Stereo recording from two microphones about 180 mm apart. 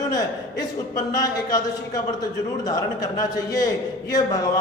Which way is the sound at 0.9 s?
20° left (ahead or behind).